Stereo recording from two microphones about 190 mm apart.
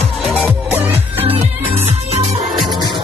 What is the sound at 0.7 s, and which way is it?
Music, 10° right (ahead or behind).